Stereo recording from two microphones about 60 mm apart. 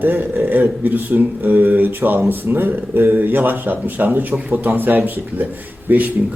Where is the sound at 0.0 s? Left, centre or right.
Right.